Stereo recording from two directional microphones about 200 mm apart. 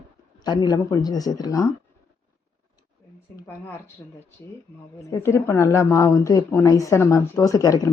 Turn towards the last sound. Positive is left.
turn(degrees=15)  # may be behind; listen again after turning